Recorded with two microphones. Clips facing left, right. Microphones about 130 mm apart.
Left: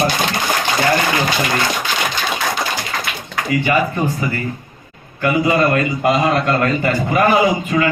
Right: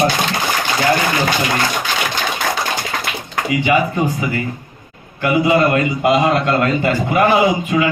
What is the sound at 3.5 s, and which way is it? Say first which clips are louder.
A man's voice: right 1 dB; 15° right (ahead or behind).